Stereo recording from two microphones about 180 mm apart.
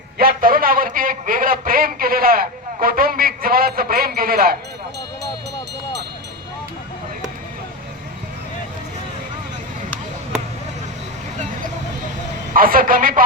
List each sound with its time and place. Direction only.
0.2 s a man's voice: 55° right (ahead or behind)
12.5 s a man's voice: 50° right (ahead or behind)